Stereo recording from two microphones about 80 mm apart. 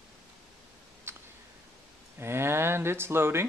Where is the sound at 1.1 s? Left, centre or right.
Right.